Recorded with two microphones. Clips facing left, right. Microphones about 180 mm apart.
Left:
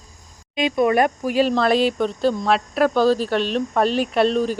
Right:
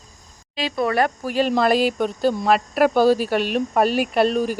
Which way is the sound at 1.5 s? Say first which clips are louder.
Even; 5° right (ahead or behind).